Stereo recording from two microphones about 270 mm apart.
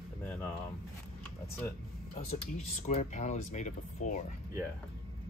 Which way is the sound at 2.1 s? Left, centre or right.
Left.